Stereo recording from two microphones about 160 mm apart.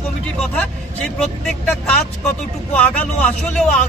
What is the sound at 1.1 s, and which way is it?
Speech, 5° left (ahead or behind).